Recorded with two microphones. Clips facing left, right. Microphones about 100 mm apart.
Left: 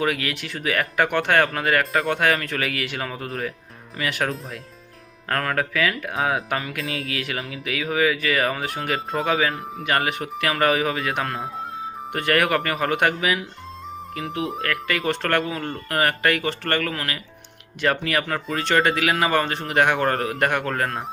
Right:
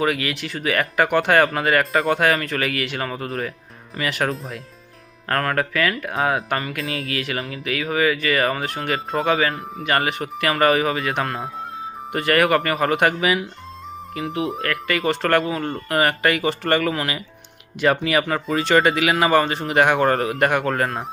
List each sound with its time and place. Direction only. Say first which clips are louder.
0.0 s speech: right 2 dB; centre (ahead or behind)